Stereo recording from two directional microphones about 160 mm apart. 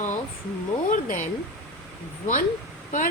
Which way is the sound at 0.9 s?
60° left (ahead or behind).